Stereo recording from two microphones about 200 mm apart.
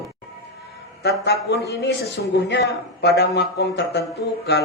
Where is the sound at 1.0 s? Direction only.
55° left (ahead or behind).